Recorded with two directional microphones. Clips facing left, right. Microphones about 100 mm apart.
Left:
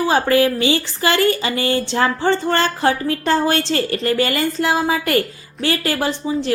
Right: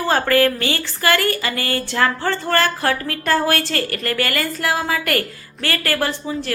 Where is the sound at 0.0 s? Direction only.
15° left (ahead or behind).